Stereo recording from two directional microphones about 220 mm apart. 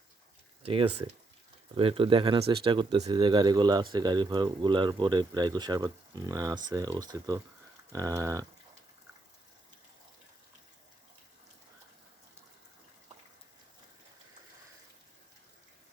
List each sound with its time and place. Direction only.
0.6 s speech: 25° right (ahead or behind)